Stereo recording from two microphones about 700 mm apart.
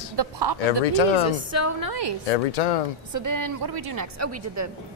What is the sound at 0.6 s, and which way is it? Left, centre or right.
Speech, left.